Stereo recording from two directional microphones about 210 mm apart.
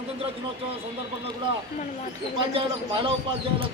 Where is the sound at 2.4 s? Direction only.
25° right (ahead or behind).